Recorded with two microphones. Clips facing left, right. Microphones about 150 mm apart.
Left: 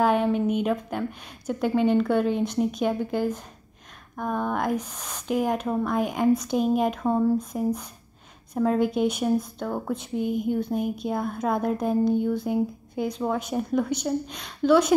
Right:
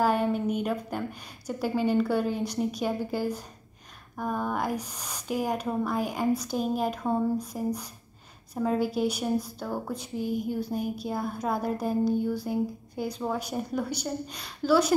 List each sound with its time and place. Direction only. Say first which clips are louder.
0.0 s a woman's voice: left 3 dB; 5° right (ahead or behind)